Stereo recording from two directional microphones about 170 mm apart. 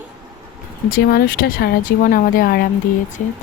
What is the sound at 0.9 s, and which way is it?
Speech, 65° left (ahead or behind).